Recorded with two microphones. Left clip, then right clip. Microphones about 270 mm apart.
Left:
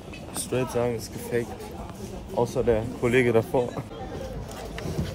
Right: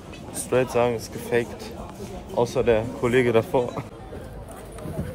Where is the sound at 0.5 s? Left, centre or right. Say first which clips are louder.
Right 5 dB; centre.